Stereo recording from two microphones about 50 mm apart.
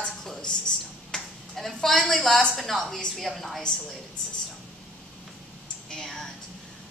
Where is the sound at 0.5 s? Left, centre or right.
Centre.